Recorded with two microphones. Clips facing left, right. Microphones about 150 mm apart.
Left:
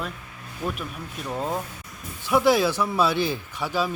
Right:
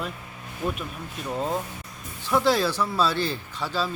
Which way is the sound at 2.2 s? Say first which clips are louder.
Left 2 dB; 15° left (ahead or behind).